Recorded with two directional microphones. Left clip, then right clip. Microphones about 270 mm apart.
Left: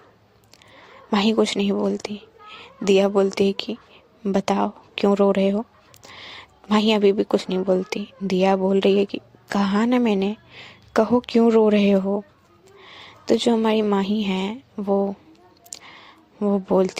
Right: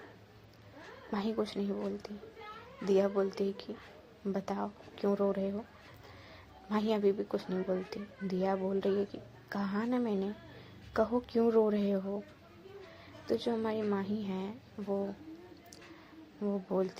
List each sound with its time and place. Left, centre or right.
1.1 s a woman's voice: left
16.4 s a woman's voice: left